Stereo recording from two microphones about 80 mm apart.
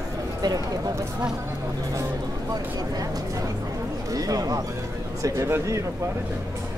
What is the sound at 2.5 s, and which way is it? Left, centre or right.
Speech, right.